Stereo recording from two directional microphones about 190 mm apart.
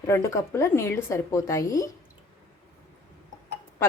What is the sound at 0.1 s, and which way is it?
A woman's voice, 15° left (ahead or behind).